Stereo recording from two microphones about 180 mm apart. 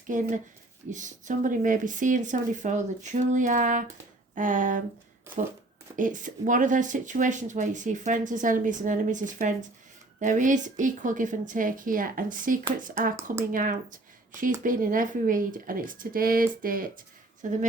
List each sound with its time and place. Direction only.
0.1 s speech: 45° right (ahead or behind)
6.0 s speech: 45° right (ahead or behind)